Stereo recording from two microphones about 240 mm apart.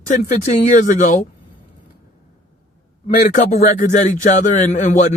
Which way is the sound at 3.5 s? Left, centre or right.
Left.